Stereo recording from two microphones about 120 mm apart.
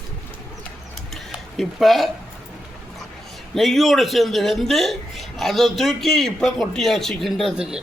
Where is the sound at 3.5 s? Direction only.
Centre (ahead or behind).